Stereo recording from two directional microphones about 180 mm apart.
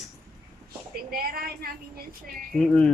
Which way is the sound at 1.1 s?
60° right (ahead or behind).